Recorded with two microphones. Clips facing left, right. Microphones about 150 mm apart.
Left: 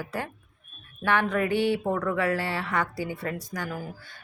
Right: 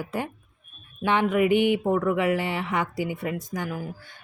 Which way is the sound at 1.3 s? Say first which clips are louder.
Right 4 dB; 15° right (ahead or behind).